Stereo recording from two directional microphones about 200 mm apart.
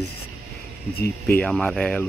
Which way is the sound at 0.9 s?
50° left (ahead or behind).